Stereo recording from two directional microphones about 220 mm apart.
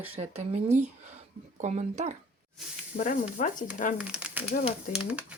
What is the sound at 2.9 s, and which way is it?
Speech, 35° left (ahead or behind).